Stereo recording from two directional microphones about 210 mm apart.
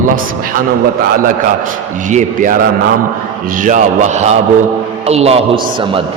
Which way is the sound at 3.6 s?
35° right (ahead or behind).